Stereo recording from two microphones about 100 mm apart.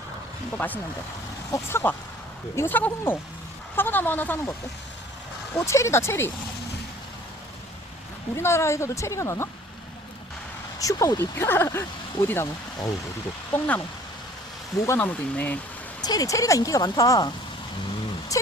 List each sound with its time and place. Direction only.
0.5 s speech: 15° left (ahead or behind)
5.6 s speech: 30° left (ahead or behind)
8.4 s speech: 25° left (ahead or behind)
10.8 s speech: 35° left (ahead or behind)
13.5 s speech: 25° left (ahead or behind)
14.9 s speech: 15° left (ahead or behind)
16.0 s speech: 35° left (ahead or behind)